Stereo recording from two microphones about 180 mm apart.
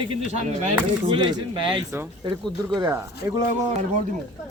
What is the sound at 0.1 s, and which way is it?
Speech, 40° right (ahead or behind).